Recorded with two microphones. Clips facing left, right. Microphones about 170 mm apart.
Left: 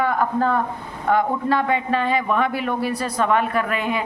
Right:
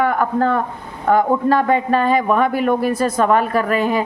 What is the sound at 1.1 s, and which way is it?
A woman's voice, 45° right (ahead or behind).